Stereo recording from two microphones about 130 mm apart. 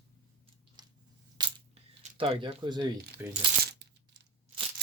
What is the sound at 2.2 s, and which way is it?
Speech, 40° right (ahead or behind).